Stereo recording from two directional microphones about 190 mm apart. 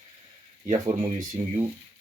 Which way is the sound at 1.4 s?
35° right (ahead or behind).